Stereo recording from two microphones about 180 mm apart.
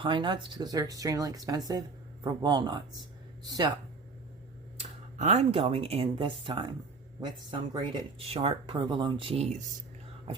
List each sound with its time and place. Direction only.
0.0 s speech: 25° right (ahead or behind)
4.8 s speech: 40° right (ahead or behind)